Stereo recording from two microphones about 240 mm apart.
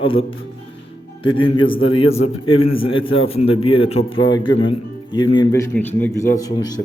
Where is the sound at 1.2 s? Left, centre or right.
Left.